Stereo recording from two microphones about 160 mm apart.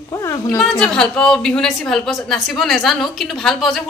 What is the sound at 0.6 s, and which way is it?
A woman's voice, centre (ahead or behind).